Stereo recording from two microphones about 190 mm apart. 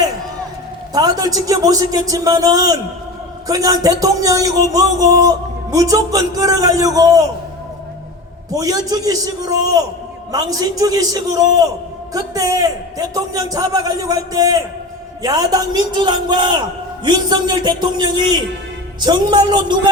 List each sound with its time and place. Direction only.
0.9 s a man's voice: 20° right (ahead or behind)
8.5 s a man's voice: 20° right (ahead or behind)